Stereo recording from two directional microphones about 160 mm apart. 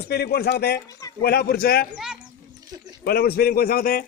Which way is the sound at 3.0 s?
75° left (ahead or behind).